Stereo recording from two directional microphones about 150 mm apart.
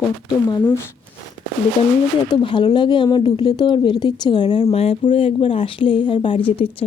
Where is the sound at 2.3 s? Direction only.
30° left (ahead or behind).